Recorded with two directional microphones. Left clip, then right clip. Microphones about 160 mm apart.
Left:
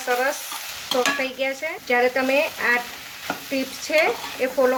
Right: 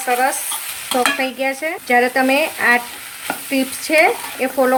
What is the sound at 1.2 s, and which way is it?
Cutlery, 30° right (ahead or behind).